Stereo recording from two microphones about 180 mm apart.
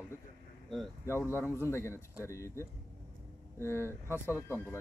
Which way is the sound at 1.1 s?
15° left (ahead or behind).